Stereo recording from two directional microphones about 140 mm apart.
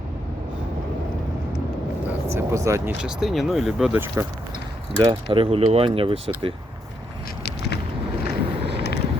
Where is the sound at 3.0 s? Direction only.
5° right (ahead or behind).